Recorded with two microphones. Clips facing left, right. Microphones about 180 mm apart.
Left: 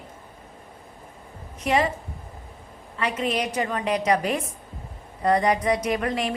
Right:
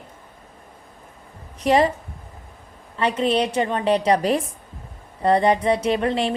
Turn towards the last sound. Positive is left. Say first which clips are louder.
# right 4 dB
turn(degrees=-25)  # may be behind; listen again after turning